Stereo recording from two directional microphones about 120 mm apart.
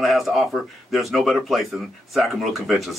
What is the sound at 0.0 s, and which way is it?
Speech, centre (ahead or behind).